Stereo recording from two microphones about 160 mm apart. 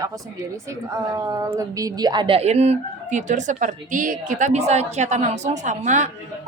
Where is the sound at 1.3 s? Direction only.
20° right (ahead or behind).